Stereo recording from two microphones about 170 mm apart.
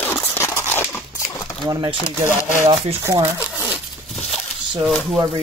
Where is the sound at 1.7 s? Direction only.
20° right (ahead or behind).